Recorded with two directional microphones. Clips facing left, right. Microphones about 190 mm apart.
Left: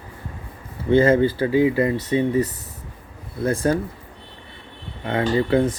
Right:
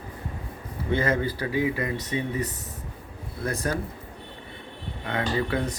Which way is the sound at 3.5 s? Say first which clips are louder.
Left 8 dB; 30° left (ahead or behind).